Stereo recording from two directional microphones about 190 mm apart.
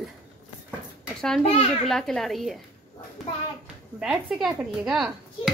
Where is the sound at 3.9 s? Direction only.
5° right (ahead or behind).